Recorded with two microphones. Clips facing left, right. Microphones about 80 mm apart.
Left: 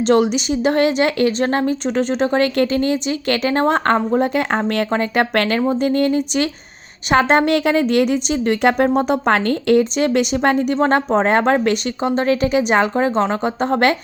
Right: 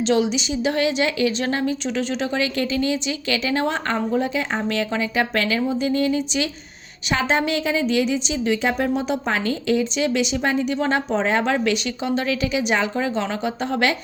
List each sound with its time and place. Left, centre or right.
0.0 s a woman's voice: left